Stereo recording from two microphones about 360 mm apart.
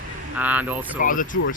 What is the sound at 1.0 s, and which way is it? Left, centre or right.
Speech, left.